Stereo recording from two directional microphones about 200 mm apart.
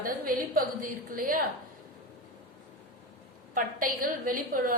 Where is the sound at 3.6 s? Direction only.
45° right (ahead or behind).